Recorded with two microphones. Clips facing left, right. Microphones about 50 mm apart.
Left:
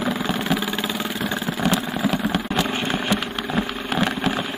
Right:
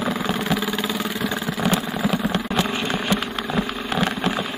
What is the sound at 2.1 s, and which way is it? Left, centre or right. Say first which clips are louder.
Vehicle: even; centre.